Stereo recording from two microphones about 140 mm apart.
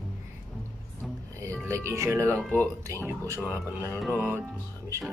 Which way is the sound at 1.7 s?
20° right (ahead or behind).